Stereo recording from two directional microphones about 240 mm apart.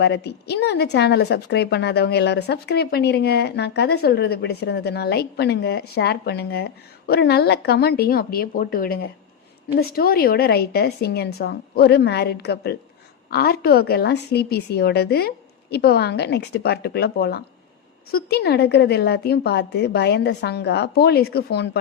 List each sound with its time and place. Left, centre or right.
0.0 s a woman's voice: left